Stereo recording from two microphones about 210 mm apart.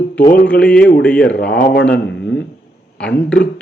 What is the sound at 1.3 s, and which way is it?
A man's voice, 50° left (ahead or behind).